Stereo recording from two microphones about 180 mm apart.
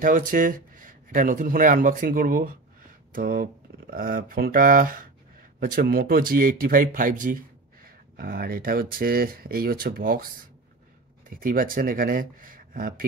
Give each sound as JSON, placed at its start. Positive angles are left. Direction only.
{"t": 0.0, "sound": "speech", "side_deg": -50}